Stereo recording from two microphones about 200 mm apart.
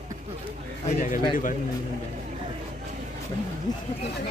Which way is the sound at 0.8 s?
40° left (ahead or behind).